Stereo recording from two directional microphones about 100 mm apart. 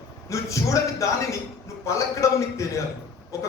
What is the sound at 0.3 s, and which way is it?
A man's voice, 30° left (ahead or behind).